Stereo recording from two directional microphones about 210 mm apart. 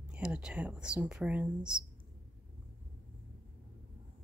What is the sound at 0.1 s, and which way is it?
Speech, 5° right (ahead or behind).